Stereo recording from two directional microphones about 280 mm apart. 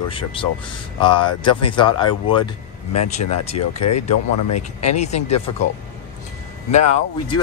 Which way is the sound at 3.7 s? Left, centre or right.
Left.